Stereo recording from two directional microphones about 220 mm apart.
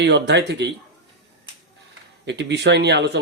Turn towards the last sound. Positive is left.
turn(degrees=-50)  # may be behind; listen again after turning